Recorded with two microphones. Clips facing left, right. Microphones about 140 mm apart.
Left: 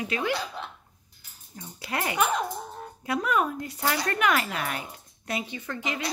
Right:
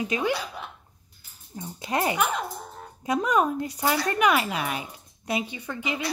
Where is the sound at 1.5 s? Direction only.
20° right (ahead or behind).